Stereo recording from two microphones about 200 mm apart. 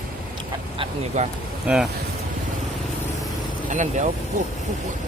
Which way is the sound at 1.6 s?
5° right (ahead or behind).